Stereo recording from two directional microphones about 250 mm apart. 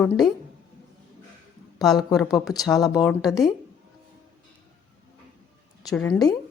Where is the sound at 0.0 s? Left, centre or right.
Centre.